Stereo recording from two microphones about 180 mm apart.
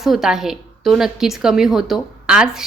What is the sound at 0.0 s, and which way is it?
A woman's voice, centre (ahead or behind).